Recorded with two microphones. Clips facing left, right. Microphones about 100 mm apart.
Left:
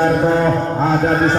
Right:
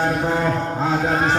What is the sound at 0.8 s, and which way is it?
Speech, 5° right (ahead or behind).